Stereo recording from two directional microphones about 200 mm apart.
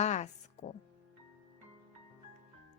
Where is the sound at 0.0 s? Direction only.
35° left (ahead or behind).